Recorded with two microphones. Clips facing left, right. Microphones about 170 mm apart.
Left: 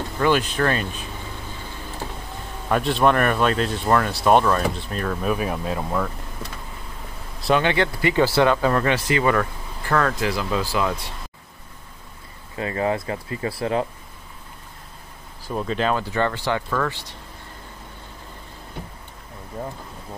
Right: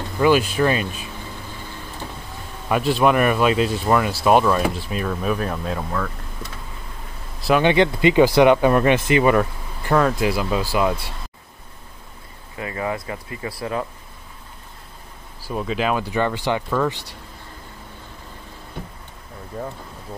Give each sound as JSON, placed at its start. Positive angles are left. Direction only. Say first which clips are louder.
{"t": 0.2, "sound": "speech", "louder": "right 3 dB", "side_deg": -10}
{"t": 2.7, "sound": "speech", "louder": "right 1 dB", "side_deg": -5}
{"t": 7.6, "sound": "speech", "louder": "right 5 dB", "side_deg": -20}
{"t": 12.5, "sound": "speech", "louder": "left 3 dB", "side_deg": 30}
{"t": 15.4, "sound": "speech", "louder": "even", "side_deg": -5}